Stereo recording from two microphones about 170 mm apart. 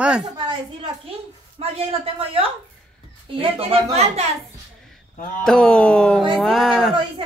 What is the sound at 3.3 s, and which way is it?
Speech, 35° right (ahead or behind).